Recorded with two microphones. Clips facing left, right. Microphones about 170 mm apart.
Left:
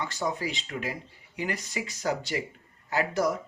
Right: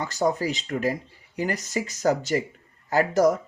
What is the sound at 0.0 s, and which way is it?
Speech, 40° right (ahead or behind).